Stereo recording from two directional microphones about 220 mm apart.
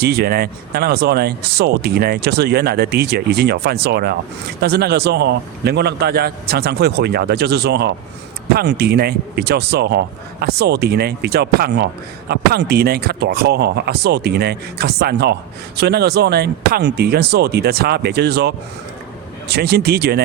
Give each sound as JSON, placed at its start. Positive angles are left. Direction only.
{"t": 0.0, "sound": "speech", "side_deg": -45}